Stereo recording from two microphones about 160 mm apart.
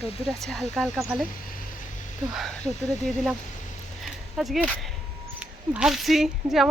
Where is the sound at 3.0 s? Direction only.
Centre (ahead or behind).